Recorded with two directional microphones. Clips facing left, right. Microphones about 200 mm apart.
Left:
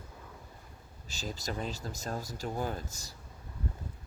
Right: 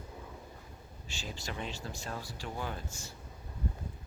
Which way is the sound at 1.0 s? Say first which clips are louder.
Left 4 dB; 40° left (ahead or behind).